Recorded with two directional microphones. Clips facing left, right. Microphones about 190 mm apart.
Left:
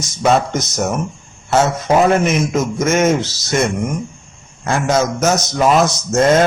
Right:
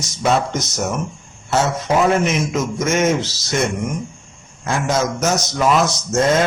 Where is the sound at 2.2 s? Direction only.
50° left (ahead or behind).